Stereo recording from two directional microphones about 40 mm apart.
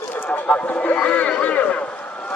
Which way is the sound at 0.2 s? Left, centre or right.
Left.